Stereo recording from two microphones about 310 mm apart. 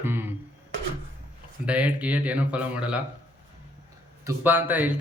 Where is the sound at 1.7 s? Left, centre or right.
Centre.